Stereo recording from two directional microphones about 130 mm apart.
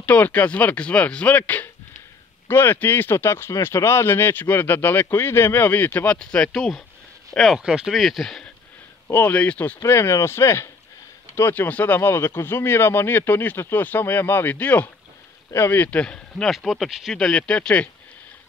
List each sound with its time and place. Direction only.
0.0 s speech: 15° left (ahead or behind)
9.0 s speech: 15° left (ahead or behind)
9.8 s speech: 20° left (ahead or behind)